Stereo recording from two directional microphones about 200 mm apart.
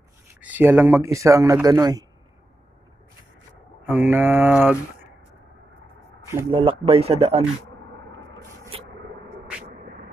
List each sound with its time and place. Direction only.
0.3 s speech: 10° right (ahead or behind)
3.8 s speech: 10° right (ahead or behind)
6.5 s speech: 25° right (ahead or behind)
9.8 s a sound: 45° right (ahead or behind)